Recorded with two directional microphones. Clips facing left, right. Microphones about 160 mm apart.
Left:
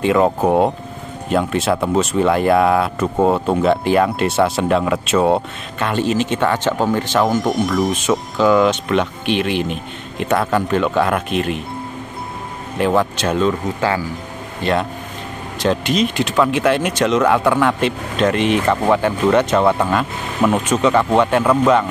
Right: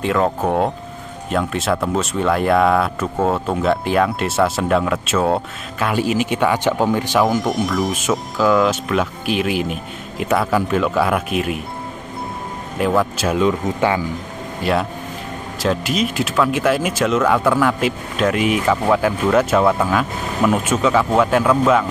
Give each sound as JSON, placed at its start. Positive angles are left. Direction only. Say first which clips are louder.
{"t": 0.0, "sound": "speech", "louder": "left 3 dB", "side_deg": 5}
{"t": 12.7, "sound": "speech", "louder": "left 1 dB", "side_deg": 0}
{"t": 13.7, "sound": "speech", "louder": "right 1 dB", "side_deg": -20}
{"t": 14.6, "sound": "speech", "louder": "left 1 dB", "side_deg": -5}